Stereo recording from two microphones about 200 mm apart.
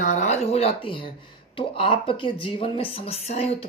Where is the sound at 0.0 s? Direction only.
35° left (ahead or behind).